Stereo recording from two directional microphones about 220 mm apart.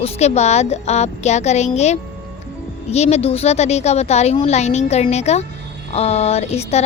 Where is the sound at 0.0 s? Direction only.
30° left (ahead or behind).